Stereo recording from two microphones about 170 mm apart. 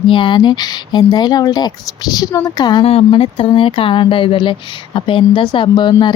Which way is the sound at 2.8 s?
35° left (ahead or behind).